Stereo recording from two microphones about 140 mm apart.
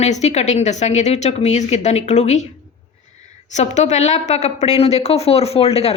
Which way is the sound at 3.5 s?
55° left (ahead or behind).